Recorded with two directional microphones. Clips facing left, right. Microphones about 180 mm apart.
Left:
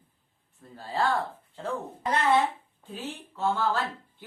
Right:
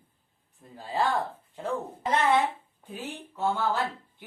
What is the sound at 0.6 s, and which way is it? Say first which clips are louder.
Speech: even; 15° right (ahead or behind).